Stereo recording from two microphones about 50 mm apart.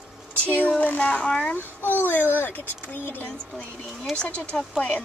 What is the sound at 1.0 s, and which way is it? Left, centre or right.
Speech, left.